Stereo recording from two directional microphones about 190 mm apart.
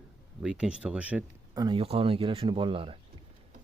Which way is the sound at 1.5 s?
25° right (ahead or behind).